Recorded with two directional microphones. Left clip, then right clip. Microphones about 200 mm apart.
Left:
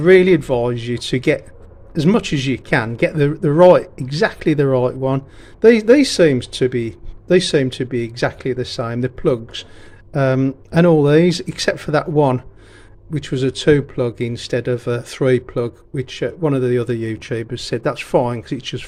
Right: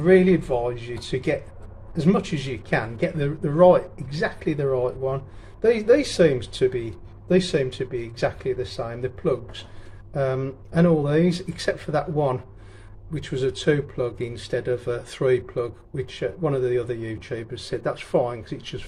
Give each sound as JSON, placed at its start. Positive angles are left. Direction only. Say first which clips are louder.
{"t": 0.0, "sound": "speech", "louder": "left 7 dB", "side_deg": 45}